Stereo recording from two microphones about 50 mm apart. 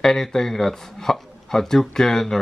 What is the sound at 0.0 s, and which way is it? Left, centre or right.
Speech, centre.